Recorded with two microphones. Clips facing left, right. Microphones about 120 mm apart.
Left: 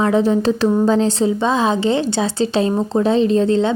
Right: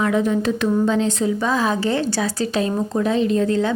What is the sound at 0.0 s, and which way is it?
A woman's voice, 30° left (ahead or behind).